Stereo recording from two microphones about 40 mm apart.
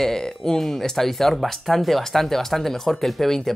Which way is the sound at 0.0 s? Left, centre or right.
Centre.